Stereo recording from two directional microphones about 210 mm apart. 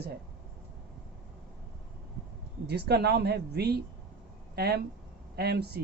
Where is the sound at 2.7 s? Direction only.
50° right (ahead or behind).